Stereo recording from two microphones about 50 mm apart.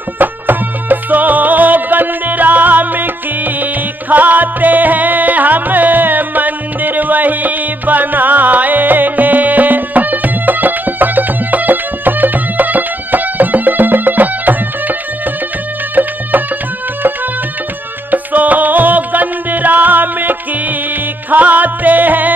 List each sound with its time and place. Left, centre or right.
0.2 s music: right
18.1 s music: right